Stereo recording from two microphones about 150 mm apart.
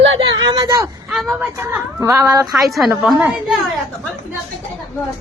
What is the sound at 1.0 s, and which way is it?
Speech, centre (ahead or behind).